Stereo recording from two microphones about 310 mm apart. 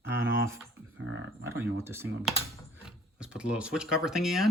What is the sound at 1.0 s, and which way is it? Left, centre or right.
Speech, right.